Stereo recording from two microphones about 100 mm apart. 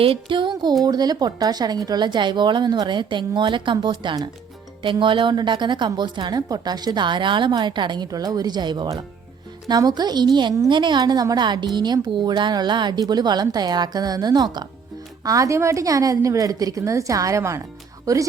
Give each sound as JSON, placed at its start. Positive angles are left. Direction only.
{"t": 0.0, "sound": "a woman's voice", "side_deg": -60}